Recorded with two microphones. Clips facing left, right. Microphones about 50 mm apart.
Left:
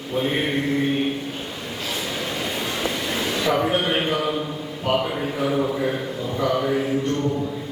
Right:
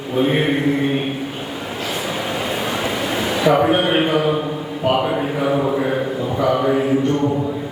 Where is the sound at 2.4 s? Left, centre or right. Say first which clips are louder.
Right 3 dB; centre.